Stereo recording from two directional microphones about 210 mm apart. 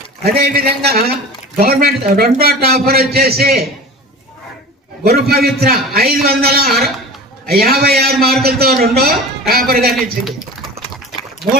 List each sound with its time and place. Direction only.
0.3 s a man's voice: 45° right (ahead or behind)
5.0 s a man's voice: 45° right (ahead or behind)